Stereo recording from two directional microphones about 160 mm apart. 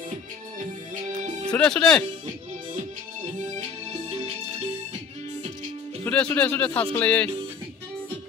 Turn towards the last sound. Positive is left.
turn(degrees=10)  # may be behind; listen again after turning